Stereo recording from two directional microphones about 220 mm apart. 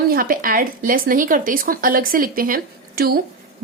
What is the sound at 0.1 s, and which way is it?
A woman's voice, 40° right (ahead or behind).